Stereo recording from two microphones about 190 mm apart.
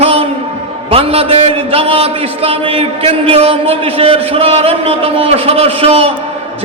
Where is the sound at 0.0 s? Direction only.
30° right (ahead or behind).